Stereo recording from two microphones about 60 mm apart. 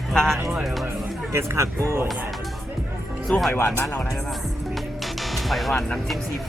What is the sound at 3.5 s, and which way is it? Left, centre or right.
Speech, left.